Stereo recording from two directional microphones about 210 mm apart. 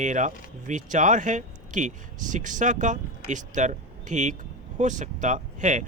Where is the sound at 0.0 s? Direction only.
35° right (ahead or behind).